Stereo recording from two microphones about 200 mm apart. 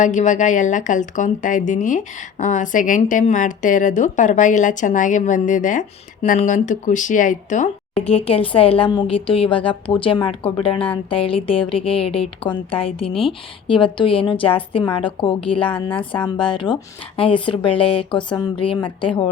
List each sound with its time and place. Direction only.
0.0 s speech: 35° left (ahead or behind)
8.0 s a woman's voice: 30° left (ahead or behind)